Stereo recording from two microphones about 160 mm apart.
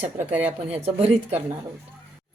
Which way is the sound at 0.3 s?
10° right (ahead or behind).